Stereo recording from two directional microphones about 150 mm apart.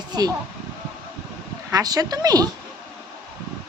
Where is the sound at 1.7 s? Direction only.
25° right (ahead or behind).